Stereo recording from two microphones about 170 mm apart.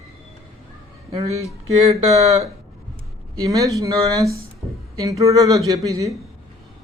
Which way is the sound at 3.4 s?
20° right (ahead or behind).